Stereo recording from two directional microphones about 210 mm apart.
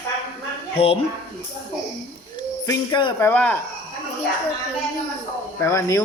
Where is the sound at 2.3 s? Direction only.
20° left (ahead or behind).